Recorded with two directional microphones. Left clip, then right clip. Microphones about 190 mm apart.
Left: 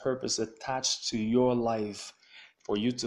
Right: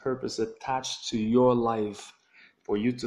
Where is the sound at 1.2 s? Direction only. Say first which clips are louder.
Right 5 dB; 10° left (ahead or behind).